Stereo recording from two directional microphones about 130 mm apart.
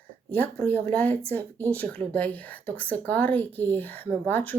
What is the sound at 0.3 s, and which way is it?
Speech, 15° left (ahead or behind).